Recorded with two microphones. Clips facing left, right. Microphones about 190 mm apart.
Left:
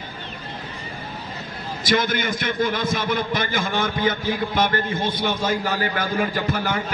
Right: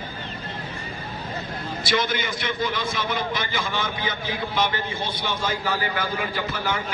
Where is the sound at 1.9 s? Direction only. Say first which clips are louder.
Left 4 dB; 50° left (ahead or behind).